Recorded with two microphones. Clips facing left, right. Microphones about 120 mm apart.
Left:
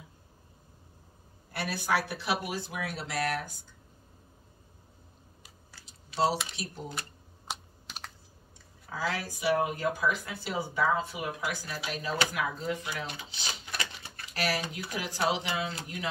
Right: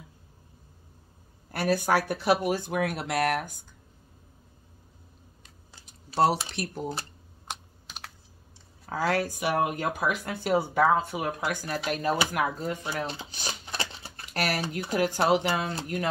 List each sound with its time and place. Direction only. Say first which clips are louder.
1.5 s speech: right 6 dB; 50° right (ahead or behind)
6.1 s speech: right 4 dB; 55° right (ahead or behind)
7.4 s computer keyboard: even; centre (ahead or behind)
8.8 s speech: right 7 dB; 55° right (ahead or behind)
12.9 s speech: right 5 dB; 30° right (ahead or behind)
13.7 s a sound: right 3 dB; 30° right (ahead or behind)
14.3 s speech: right 3 dB; 50° right (ahead or behind)